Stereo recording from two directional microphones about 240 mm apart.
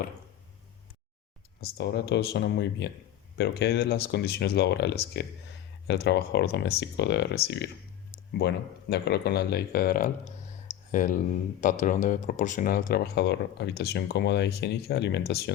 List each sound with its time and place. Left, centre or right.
1.6 s speech: left